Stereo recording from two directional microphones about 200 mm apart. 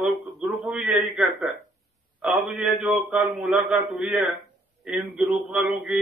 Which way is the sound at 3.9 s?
5° right (ahead or behind).